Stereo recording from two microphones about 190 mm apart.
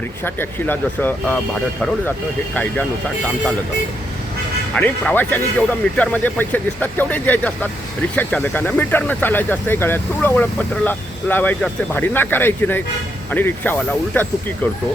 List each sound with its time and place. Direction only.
0.3 s speech: 10° left (ahead or behind)
4.7 s speech: 5° left (ahead or behind)